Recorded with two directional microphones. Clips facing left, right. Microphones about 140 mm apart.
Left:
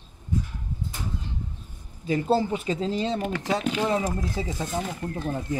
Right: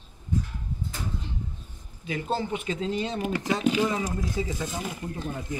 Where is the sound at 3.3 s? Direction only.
5° right (ahead or behind).